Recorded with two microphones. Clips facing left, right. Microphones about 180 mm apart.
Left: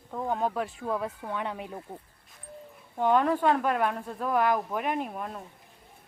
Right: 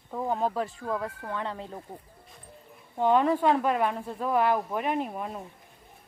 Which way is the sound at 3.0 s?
Centre (ahead or behind).